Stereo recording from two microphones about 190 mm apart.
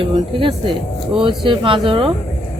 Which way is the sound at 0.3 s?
25° right (ahead or behind).